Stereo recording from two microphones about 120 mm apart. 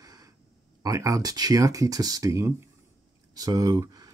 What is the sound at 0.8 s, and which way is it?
Speech, 25° right (ahead or behind).